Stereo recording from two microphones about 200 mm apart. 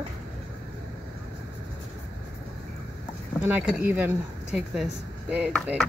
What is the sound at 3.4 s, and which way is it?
Speech, 10° right (ahead or behind).